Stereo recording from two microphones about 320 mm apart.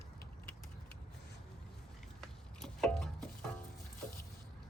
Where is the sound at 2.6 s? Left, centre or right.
Centre.